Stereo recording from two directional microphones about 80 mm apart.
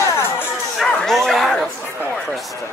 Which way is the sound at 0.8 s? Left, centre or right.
Centre.